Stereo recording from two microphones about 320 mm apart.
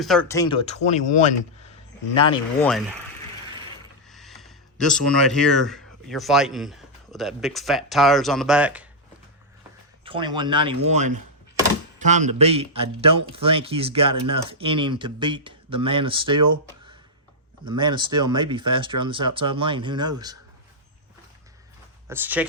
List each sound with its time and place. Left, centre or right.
0.0 s speech: centre
2.6 s speech: centre
4.1 s speech: centre
10.0 s speech: centre
17.7 s speech: centre
22.0 s speech: centre